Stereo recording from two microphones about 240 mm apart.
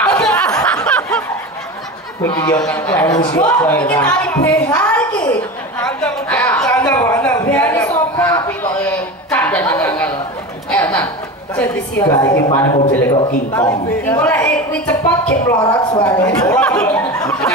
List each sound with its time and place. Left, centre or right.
0.0 s snicker: centre
2.2 s a man's voice: centre
5.9 s a sound: centre
11.5 s a man's voice: centre
16.3 s speech: centre